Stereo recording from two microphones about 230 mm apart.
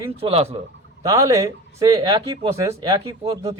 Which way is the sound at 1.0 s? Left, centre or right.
Centre.